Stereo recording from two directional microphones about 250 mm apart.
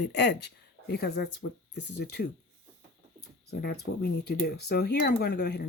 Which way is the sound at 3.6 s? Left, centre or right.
Left.